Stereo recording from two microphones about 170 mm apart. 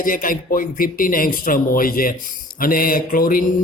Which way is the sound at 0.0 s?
55° left (ahead or behind).